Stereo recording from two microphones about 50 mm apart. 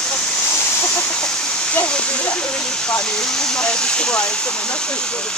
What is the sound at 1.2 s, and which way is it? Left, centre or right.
Speech, left.